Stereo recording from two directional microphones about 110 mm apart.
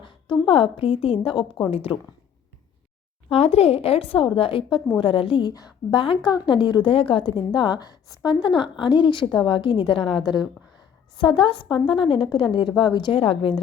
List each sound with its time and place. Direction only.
0.0 s speech: 50° left (ahead or behind)
3.2 s a woman's voice: 65° left (ahead or behind); by 8.3 s 35° left (ahead or behind)
8.3 s a woman's voice: 45° left (ahead or behind)